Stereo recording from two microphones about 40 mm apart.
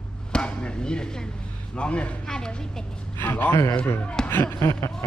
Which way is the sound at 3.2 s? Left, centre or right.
Left.